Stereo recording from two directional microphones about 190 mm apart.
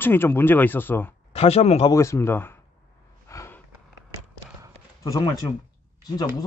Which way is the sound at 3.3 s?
15° left (ahead or behind).